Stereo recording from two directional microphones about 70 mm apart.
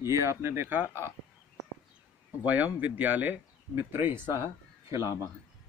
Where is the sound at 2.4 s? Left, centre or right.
Right.